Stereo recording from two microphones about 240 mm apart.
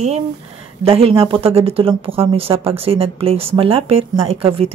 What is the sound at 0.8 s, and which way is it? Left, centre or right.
Speech, right.